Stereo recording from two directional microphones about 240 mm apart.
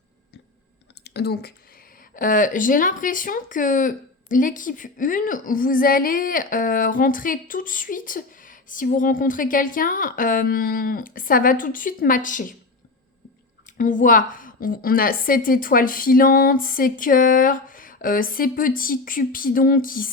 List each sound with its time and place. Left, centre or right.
1.0 s speech: left
13.7 s speech: left